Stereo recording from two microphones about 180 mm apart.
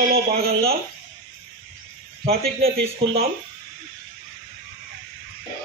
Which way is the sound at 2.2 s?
60° right (ahead or behind).